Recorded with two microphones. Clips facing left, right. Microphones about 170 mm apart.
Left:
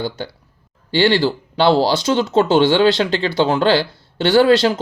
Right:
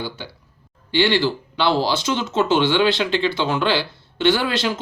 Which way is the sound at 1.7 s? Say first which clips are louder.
Left 5 dB; 35° left (ahead or behind).